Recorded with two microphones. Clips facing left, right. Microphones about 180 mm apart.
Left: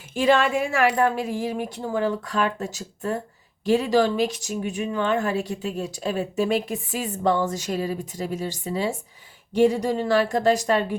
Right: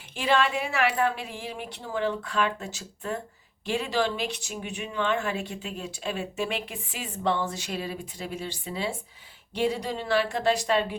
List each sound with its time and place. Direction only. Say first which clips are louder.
0.2 s a woman's voice: left 5 dB; 45° left (ahead or behind)